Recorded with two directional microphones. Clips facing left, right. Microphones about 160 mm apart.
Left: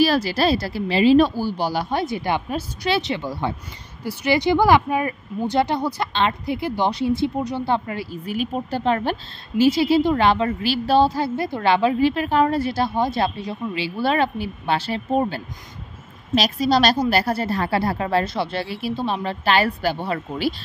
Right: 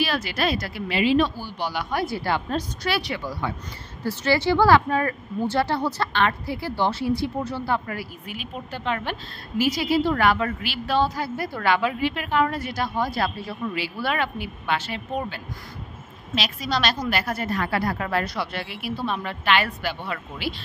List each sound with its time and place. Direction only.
0.0 s a woman's voice: 35° left (ahead or behind)
2.0 s a woman's voice: 20° left (ahead or behind)
4.0 s speech: 15° left (ahead or behind)
8.3 s a woman's voice: 40° left (ahead or behind)